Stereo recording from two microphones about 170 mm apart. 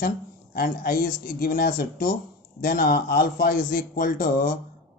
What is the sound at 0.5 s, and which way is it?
Speech, 55° left (ahead or behind).